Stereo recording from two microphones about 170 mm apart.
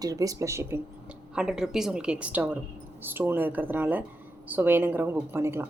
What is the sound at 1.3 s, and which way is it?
A woman's voice, 5° right (ahead or behind).